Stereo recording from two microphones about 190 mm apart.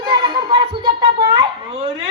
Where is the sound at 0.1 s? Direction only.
20° right (ahead or behind).